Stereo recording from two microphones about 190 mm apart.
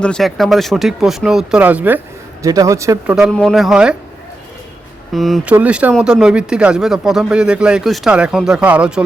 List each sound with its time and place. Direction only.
0.0 s speech: centre (ahead or behind); by 3.2 s 15° right (ahead or behind)
3.2 s speech: centre (ahead or behind)
5.1 s speech: centre (ahead or behind)